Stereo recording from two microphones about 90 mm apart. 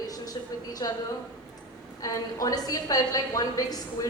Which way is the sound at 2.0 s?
40° left (ahead or behind).